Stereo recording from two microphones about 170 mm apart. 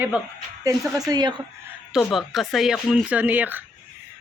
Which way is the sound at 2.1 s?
Centre (ahead or behind).